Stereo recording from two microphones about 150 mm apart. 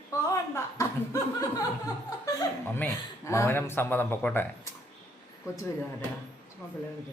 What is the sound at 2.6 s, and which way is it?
A man's voice, 15° left (ahead or behind).